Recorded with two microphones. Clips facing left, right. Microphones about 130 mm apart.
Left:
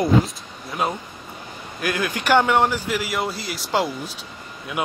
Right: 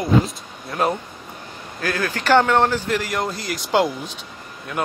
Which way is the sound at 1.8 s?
15° left (ahead or behind).